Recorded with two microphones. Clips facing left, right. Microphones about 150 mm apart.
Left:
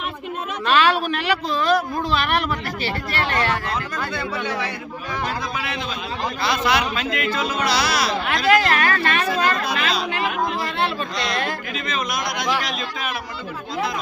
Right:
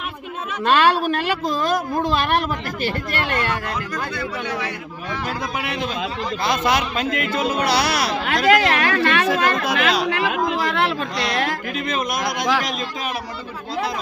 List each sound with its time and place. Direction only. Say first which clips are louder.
0.8 s a woman's voice: even; 45° right (ahead or behind)
4.1 s speech: even; 30° left (ahead or behind)
6.4 s a woman's voice: right 1 dB; 45° right (ahead or behind)